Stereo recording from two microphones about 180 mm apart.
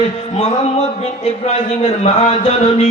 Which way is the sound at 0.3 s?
35° left (ahead or behind).